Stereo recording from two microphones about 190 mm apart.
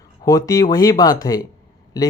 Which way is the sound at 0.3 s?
15° left (ahead or behind).